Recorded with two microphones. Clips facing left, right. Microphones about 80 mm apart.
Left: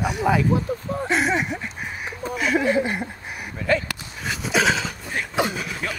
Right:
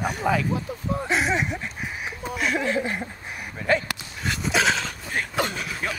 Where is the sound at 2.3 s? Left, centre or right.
Centre.